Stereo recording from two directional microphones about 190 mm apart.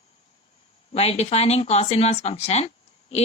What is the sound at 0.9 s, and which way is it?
Speech, 35° left (ahead or behind).